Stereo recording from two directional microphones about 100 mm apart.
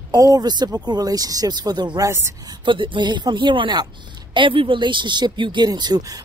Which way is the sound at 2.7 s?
55° right (ahead or behind).